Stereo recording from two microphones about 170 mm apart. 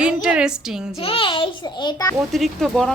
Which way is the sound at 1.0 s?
30° left (ahead or behind).